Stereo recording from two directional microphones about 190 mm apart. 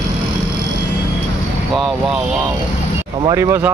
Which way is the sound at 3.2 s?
15° right (ahead or behind).